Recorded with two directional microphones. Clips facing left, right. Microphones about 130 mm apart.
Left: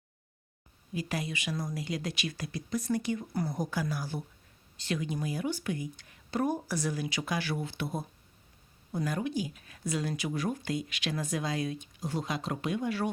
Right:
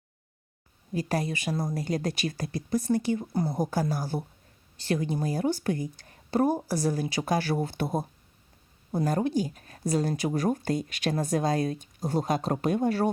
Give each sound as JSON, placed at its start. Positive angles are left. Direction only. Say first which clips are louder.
{"t": 0.9, "sound": "speech", "louder": "right 6 dB", "side_deg": -40}
{"t": 3.7, "sound": "speech", "louder": "right 5 dB", "side_deg": -40}